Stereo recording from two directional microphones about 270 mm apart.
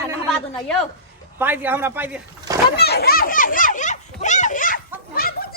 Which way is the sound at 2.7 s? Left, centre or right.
Left.